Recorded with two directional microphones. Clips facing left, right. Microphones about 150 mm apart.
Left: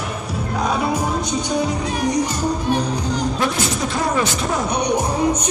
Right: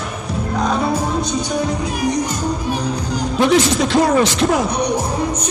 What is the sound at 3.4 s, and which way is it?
Speech, 90° right.